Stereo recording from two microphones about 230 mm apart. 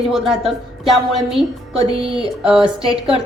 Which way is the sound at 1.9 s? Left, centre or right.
Right.